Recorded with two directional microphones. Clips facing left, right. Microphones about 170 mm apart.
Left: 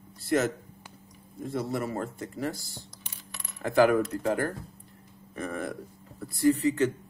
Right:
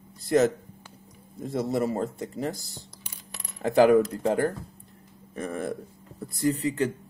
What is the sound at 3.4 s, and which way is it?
Cutlery, 20° right (ahead or behind).